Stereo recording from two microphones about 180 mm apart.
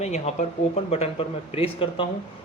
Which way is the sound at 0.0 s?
40° left (ahead or behind).